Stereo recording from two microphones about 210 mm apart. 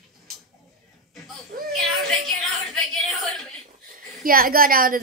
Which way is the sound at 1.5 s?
45° right (ahead or behind).